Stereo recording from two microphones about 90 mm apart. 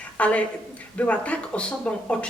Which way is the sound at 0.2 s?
15° left (ahead or behind).